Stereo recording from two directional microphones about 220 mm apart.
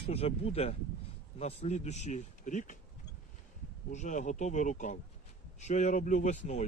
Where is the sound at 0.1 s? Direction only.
25° left (ahead or behind).